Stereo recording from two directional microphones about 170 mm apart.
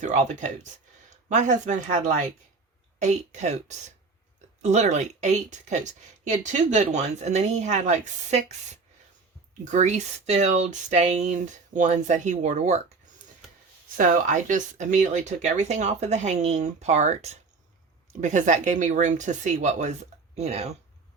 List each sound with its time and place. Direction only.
0.0 s speech: 45° right (ahead or behind)
13.9 s speech: 50° right (ahead or behind)